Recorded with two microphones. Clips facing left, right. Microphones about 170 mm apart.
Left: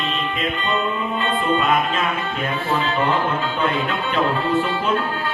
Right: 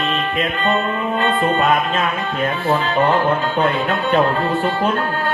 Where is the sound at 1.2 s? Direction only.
50° right (ahead or behind).